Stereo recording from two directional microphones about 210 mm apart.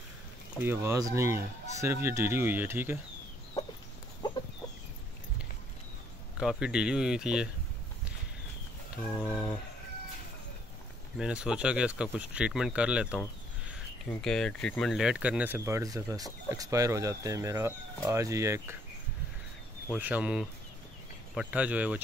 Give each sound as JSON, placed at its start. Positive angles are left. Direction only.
{"t": 0.6, "sound": "speech", "side_deg": -10}
{"t": 6.4, "sound": "speech", "side_deg": -5}
{"t": 9.0, "sound": "speech", "side_deg": 5}
{"t": 11.1, "sound": "speech", "side_deg": -5}
{"t": 14.2, "sound": "speech", "side_deg": 0}
{"t": 19.9, "sound": "speech", "side_deg": -5}